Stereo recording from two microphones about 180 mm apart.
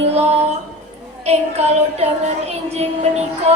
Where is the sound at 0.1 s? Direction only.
35° right (ahead or behind).